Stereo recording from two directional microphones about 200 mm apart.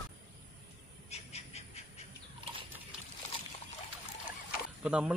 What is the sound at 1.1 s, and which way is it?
Bird, 30° left (ahead or behind).